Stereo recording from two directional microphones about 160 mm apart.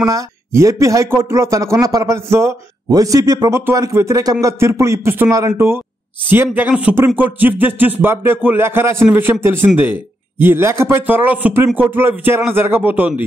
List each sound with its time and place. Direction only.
0.0 s speech: 20° right (ahead or behind)